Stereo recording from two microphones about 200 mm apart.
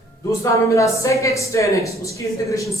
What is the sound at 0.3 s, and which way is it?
Speech, 15° left (ahead or behind).